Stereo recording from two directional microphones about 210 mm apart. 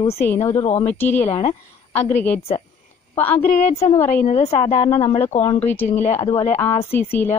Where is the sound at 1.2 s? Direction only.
30° left (ahead or behind).